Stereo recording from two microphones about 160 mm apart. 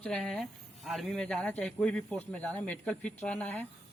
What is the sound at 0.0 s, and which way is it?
Speech, 5° left (ahead or behind).